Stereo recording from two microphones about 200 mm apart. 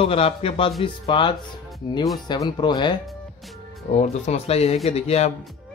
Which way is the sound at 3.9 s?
35° left (ahead or behind).